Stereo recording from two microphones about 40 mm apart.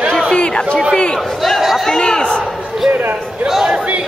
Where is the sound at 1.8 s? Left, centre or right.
Left.